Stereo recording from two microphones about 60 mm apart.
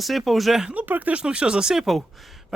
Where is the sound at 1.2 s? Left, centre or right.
Centre.